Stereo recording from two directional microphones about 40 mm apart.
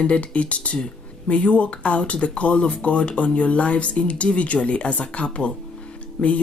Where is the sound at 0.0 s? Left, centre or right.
Left.